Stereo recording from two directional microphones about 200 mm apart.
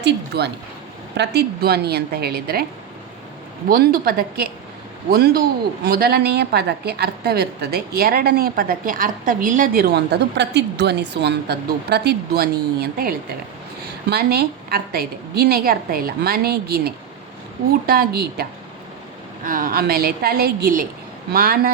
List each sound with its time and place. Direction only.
0.0 s a woman's voice: 55° right (ahead or behind)
3.7 s a woman's voice: 45° right (ahead or behind)
19.5 s a woman's voice: 45° right (ahead or behind)